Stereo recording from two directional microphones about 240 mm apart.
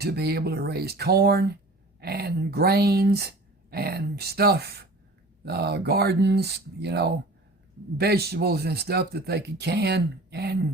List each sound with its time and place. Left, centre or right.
0.0 s speech: right